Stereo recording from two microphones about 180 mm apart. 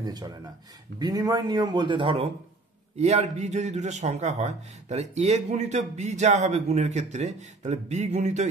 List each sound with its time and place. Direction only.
0.0 s speech: 20° right (ahead or behind); by 8.5 s 40° right (ahead or behind)